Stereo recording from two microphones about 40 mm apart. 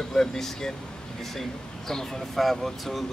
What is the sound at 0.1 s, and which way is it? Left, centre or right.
Speech, centre.